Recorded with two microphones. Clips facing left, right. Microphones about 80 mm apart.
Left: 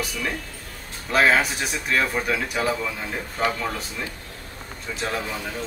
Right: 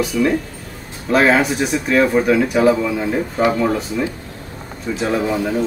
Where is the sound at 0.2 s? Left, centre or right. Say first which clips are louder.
Right 14 dB; centre.